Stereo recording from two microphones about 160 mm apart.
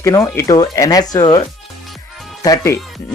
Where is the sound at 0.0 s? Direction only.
20° left (ahead or behind).